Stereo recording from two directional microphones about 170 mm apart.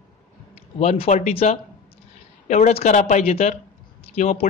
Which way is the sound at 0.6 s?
35° left (ahead or behind).